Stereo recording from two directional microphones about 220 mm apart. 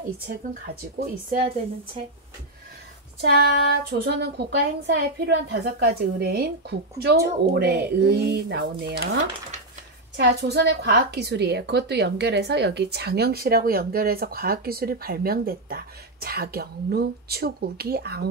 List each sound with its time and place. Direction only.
3.2 s a woman's voice: 45° right (ahead or behind)